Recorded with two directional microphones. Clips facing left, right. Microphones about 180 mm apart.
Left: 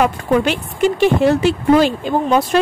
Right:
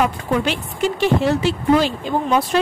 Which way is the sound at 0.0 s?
55° left (ahead or behind).